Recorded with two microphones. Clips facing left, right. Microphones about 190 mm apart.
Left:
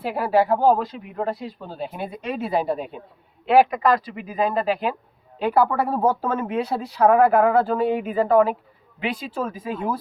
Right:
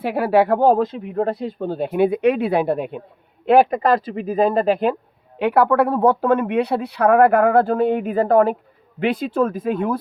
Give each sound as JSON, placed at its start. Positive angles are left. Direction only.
{"t": 0.1, "sound": "speech", "side_deg": -60}
{"t": 5.4, "sound": "speech", "side_deg": -65}